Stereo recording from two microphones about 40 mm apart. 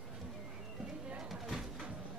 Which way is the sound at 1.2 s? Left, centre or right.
Centre.